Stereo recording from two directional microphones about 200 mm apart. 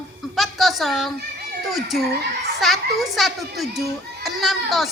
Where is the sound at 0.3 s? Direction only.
Centre (ahead or behind).